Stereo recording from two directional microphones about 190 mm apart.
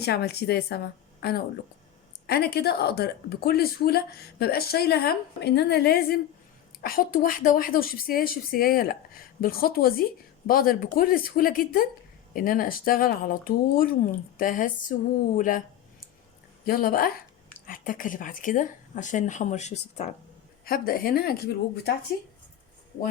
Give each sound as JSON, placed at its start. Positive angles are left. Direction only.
{"t": 0.0, "sound": "a woman's voice", "side_deg": 60}
{"t": 2.2, "sound": "a woman's voice", "side_deg": 55}
{"t": 16.6, "sound": "speech", "side_deg": 50}
{"t": 20.7, "sound": "speech", "side_deg": 50}